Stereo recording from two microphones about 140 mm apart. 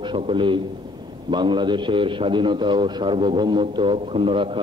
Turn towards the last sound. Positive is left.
turn(degrees=-40)  # may be behind; listen again after turning